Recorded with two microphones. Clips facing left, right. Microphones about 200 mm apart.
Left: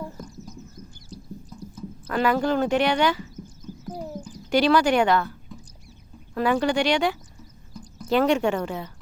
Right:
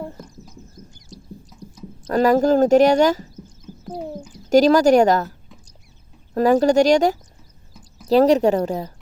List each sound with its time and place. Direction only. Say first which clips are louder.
2.0 s speech: right 7 dB; 40° right (ahead or behind)
3.8 s a sound: right 4 dB; 30° right (ahead or behind)
4.4 s a woman's voice: right 6 dB; 40° right (ahead or behind)
6.3 s a woman's voice: right 7 dB; 40° right (ahead or behind)
7.7 s a sound: left 7 dB; 5° right (ahead or behind)
8.0 s a woman's voice: right 6 dB; 35° right (ahead or behind)